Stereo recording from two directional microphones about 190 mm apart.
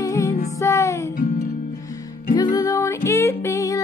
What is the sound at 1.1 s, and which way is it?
Music, 50° left (ahead or behind).